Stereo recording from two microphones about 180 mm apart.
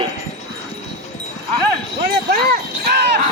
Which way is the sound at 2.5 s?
65° right (ahead or behind).